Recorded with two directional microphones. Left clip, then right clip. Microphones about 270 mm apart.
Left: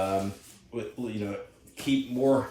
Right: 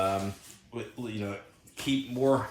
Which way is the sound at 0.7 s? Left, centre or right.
Centre.